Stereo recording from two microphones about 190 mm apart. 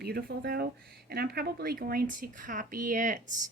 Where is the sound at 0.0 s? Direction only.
55° right (ahead or behind).